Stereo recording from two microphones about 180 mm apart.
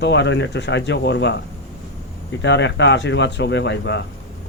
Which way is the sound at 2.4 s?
80° left.